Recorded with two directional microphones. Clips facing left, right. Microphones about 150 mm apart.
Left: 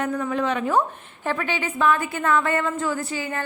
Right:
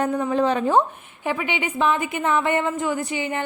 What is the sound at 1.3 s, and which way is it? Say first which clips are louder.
A woman's voice: right 1 dB; 15° right (ahead or behind).